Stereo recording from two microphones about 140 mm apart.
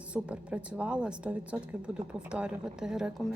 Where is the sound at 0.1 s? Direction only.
10° right (ahead or behind).